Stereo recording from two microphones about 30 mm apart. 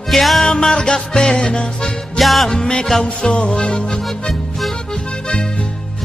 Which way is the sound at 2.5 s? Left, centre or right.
Left.